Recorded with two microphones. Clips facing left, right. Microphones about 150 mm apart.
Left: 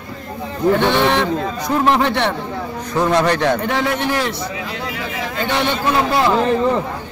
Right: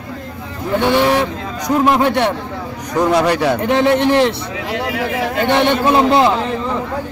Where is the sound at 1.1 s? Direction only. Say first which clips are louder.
Right 1 dB; 10° right (ahead or behind).